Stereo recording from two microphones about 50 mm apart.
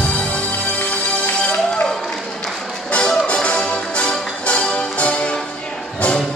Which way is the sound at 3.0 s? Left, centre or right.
Centre.